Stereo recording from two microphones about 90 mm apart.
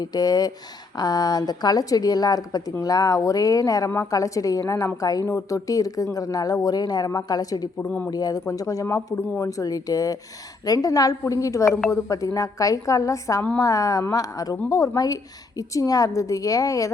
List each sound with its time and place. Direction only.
0.0 s a woman's voice: 45° left (ahead or behind)
7.9 s speech: 20° left (ahead or behind)
8.1 s a woman's voice: 45° left (ahead or behind)